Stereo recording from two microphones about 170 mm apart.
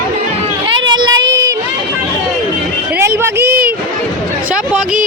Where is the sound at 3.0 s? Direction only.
15° right (ahead or behind).